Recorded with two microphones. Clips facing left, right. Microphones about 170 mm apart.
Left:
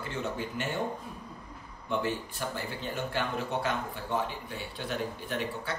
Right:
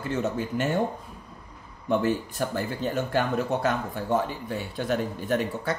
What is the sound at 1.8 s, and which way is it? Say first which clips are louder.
Speech: right 7 dB; 45° right (ahead or behind).